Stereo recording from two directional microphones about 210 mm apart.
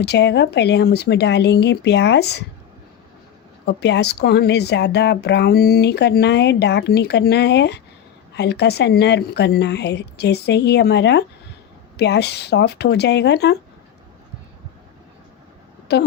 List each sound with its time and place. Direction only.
0.0 s speech: 55° left (ahead or behind)
3.7 s speech: 55° left (ahead or behind)
15.9 s speech: 50° left (ahead or behind)